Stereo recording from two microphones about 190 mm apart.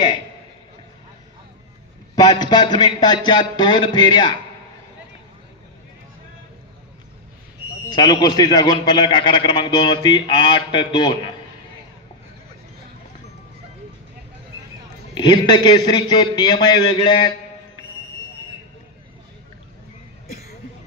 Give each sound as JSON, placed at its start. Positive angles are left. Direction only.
{"t": 2.1, "sound": "a man's voice", "side_deg": 20}
{"t": 7.9, "sound": "a man's voice", "side_deg": 20}
{"t": 15.1, "sound": "a man's voice", "side_deg": 25}
{"t": 20.2, "sound": "a sound", "side_deg": 55}